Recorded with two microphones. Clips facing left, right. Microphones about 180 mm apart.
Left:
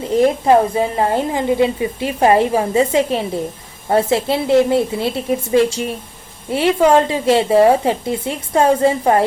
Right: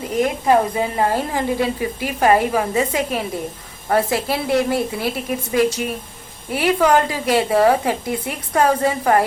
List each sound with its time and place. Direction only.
0.1 s a woman's voice: 25° left (ahead or behind)